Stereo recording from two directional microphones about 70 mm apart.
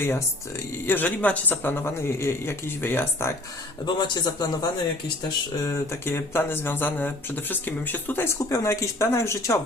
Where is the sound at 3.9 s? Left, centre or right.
Left.